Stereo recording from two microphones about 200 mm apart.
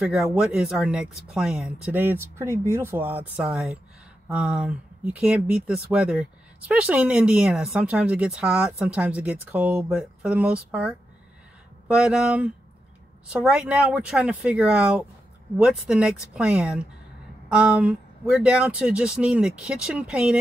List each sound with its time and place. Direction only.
0.0 s speech: centre (ahead or behind)